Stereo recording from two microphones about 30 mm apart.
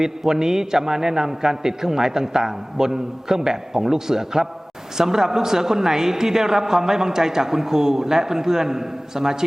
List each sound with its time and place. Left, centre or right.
0.0 s a man's voice: centre